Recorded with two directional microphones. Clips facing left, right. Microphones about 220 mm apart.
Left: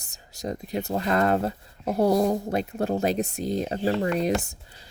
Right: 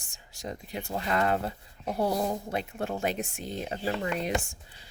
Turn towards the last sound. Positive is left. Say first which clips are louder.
# left 6 dB
turn(degrees=40)  # may be behind; listen again after turning